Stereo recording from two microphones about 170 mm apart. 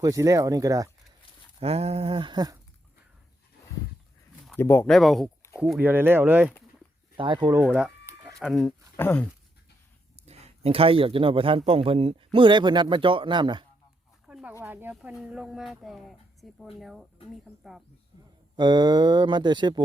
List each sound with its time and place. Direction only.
0.0 s speech: 20° right (ahead or behind)
1.5 s speech: 35° right (ahead or behind)
4.5 s speech: 15° left (ahead or behind)
4.9 s speech: centre (ahead or behind)
7.2 s speech: 30° right (ahead or behind)
7.7 s chicken: 10° right (ahead or behind)
8.4 s speech: centre (ahead or behind)
9.0 s speech: 10° left (ahead or behind)
10.2 s speech: 40° right (ahead or behind)
14.3 s a sound: 5° right (ahead or behind)
14.6 s speech: 10° right (ahead or behind)
18.5 s speech: 25° right (ahead or behind)